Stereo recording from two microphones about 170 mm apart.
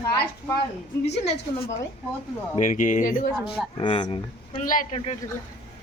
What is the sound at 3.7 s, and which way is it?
Speech, 30° left (ahead or behind).